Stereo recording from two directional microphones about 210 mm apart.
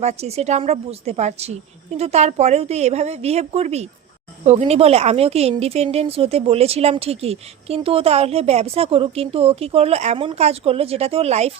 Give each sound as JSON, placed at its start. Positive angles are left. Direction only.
{"t": 0.0, "sound": "a woman's voice", "side_deg": -30}